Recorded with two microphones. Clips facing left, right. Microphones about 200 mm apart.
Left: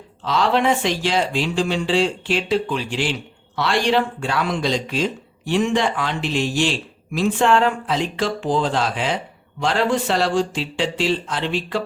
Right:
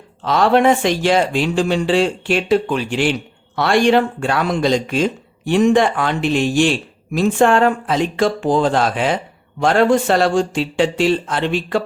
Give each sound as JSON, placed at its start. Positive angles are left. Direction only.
{"t": 0.2, "sound": "speech", "side_deg": -50}